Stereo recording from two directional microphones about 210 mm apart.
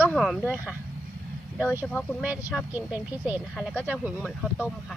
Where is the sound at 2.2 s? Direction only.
5° right (ahead or behind).